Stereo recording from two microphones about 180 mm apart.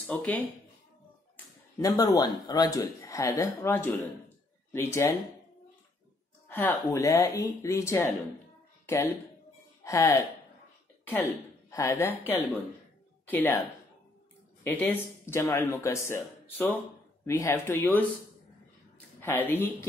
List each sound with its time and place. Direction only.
0.1 s speech: 10° left (ahead or behind)
6.7 s speech: 15° left (ahead or behind)
11.7 s speech: 15° left (ahead or behind)
14.7 s speech: 15° left (ahead or behind)
19.2 s speech: 10° left (ahead or behind)